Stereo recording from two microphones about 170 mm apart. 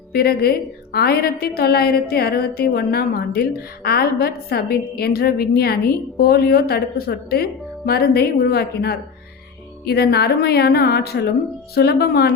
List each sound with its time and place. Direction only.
0.1 s a woman's voice: 65° left (ahead or behind)